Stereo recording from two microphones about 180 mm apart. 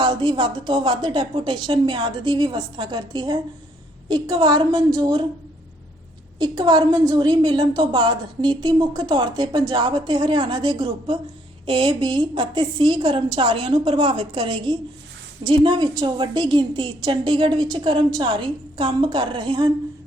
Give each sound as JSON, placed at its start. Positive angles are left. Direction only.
{"t": 0.0, "sound": "a woman's voice", "side_deg": -25}
{"t": 6.4, "sound": "a woman's voice", "side_deg": -25}